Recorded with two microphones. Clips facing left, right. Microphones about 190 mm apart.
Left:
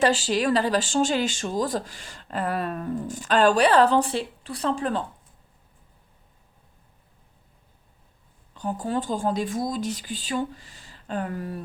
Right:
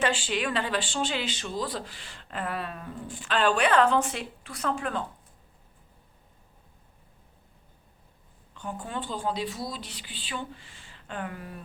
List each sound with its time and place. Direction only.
0.0 s speech: 40° left (ahead or behind)
8.5 s speech: 35° left (ahead or behind)